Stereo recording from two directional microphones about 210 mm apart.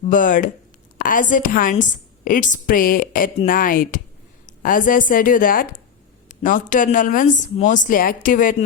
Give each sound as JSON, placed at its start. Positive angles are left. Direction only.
{"t": 0.0, "sound": "a woman's voice", "side_deg": 40}